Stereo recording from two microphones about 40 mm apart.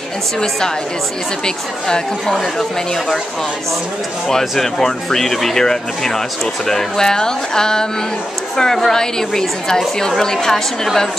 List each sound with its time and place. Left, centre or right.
1.4 s speech: centre
4.3 s speech: centre